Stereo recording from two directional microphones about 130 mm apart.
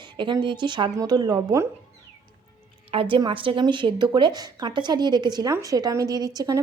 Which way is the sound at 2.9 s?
45° right (ahead or behind).